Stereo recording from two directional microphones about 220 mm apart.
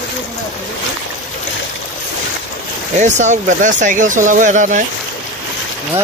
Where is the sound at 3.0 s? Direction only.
35° right (ahead or behind).